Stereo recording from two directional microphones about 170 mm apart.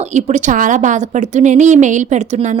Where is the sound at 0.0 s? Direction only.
45° right (ahead or behind).